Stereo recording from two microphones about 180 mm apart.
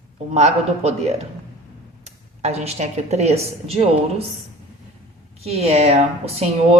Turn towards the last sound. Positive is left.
turn(degrees=-35)  # may be behind; listen again after turning